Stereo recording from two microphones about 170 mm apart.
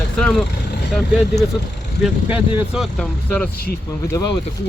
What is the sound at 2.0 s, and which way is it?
Speech, 10° right (ahead or behind).